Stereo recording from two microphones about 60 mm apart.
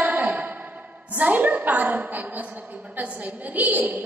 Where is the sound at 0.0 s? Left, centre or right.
Right.